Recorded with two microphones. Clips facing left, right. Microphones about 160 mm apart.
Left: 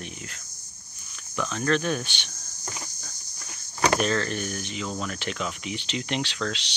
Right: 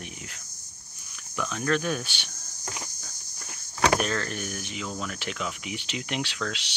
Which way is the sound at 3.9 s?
5° right (ahead or behind).